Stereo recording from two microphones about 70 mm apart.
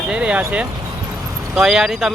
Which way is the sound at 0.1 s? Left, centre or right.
Centre.